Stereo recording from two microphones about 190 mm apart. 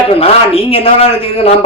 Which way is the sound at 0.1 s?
30° left (ahead or behind).